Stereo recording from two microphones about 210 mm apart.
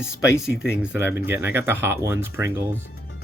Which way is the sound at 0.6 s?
5° right (ahead or behind).